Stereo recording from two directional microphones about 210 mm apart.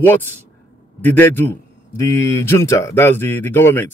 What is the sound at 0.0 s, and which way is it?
Speech, 10° left (ahead or behind).